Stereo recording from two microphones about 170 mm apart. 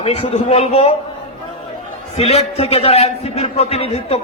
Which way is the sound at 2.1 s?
35° left (ahead or behind).